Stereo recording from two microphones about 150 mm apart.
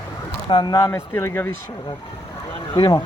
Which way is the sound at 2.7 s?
35° left (ahead or behind).